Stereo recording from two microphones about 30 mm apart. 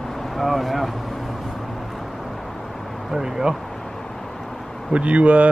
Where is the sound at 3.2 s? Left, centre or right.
Centre.